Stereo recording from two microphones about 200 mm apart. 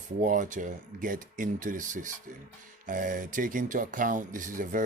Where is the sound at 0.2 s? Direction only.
40° right (ahead or behind).